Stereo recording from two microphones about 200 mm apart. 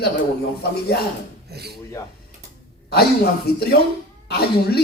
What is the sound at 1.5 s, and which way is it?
Speech, 55° right (ahead or behind).